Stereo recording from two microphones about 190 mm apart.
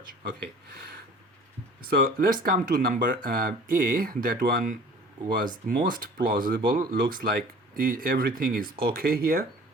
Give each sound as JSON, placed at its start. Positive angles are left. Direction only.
{"t": 2.0, "sound": "speech", "side_deg": -50}